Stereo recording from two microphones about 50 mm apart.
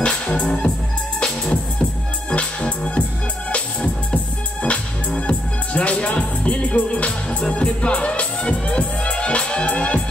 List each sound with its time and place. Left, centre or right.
0.0 s music: centre